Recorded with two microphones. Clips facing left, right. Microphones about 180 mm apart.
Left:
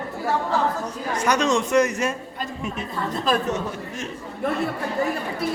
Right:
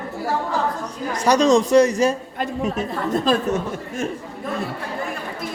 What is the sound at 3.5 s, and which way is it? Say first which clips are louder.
Speech: right 3 dB; 50° right (ahead or behind).